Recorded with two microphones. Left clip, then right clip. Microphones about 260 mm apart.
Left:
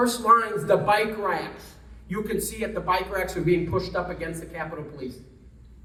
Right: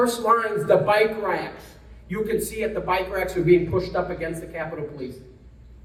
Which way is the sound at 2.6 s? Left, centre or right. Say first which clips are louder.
Left 1 dB; centre.